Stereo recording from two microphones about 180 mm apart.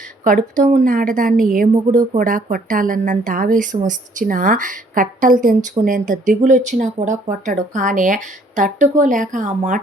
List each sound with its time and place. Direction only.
0.3 s speech: 45° right (ahead or behind)